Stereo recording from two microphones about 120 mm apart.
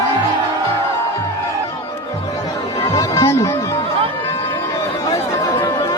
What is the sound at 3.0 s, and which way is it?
Music, 25° left (ahead or behind).